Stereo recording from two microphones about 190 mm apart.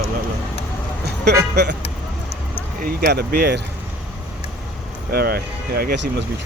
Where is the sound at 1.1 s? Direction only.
60° right (ahead or behind).